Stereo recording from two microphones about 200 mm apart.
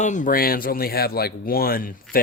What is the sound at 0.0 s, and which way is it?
Speech, 40° left (ahead or behind).